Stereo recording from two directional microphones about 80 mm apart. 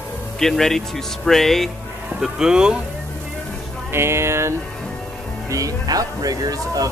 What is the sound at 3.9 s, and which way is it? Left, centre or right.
Speech, right.